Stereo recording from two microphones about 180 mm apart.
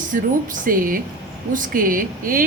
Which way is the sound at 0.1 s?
50° right (ahead or behind).